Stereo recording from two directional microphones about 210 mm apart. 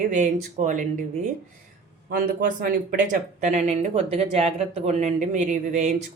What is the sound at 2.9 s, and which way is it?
A woman's voice, 35° right (ahead or behind).